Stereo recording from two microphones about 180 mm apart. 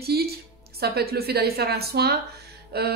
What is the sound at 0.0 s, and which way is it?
Speech, 60° right (ahead or behind).